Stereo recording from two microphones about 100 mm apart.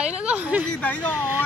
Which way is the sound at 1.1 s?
20° right (ahead or behind).